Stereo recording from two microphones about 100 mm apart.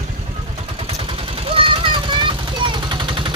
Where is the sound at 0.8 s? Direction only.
80° right.